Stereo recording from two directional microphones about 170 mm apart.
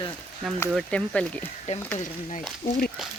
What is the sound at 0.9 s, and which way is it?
Speech, 5° left (ahead or behind).